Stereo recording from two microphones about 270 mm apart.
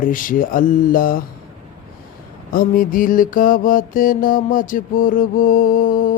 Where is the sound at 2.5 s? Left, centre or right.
Left.